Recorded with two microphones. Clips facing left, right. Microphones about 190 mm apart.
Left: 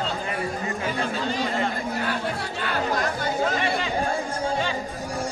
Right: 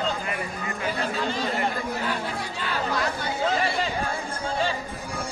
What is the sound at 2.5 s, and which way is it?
Chatter, 55° left (ahead or behind).